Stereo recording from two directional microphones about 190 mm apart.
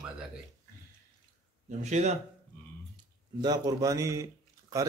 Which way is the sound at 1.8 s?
35° right (ahead or behind).